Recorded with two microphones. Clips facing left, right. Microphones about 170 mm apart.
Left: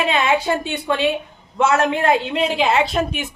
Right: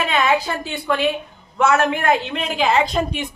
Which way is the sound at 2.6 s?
5° left (ahead or behind).